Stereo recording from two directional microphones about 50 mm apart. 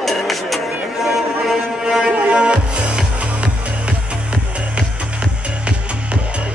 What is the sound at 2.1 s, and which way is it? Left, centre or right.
Music, right.